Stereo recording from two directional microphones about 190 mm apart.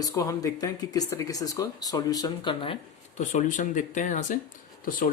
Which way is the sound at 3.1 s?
40° left (ahead or behind).